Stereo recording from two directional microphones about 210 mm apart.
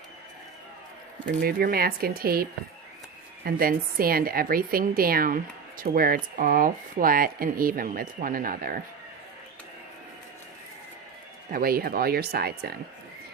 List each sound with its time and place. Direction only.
1.4 s a woman's voice: 45° right (ahead or behind)
11.5 s a woman's voice: 45° right (ahead or behind)